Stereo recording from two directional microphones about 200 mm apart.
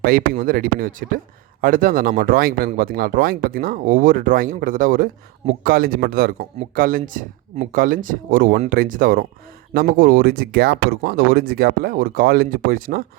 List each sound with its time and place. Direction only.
0.0 s speech: 45° right (ahead or behind)